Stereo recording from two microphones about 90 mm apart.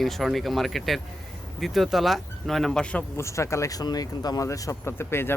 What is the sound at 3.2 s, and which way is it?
Speech, 35° left (ahead or behind).